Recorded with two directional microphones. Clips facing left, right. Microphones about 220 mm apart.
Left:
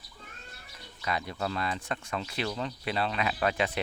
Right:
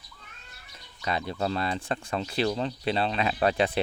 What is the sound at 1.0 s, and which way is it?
Speech, 30° right (ahead or behind).